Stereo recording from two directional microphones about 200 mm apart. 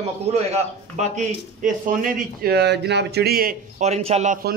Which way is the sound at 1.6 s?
45° right (ahead or behind).